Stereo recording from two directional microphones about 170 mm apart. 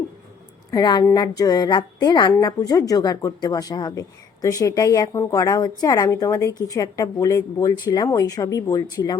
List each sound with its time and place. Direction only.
0.7 s a woman's voice: 25° left (ahead or behind)